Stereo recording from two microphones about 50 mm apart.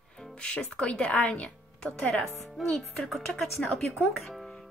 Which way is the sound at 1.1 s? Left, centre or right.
Left.